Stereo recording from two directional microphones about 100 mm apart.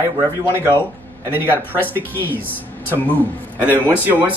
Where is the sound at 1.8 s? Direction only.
20° left (ahead or behind).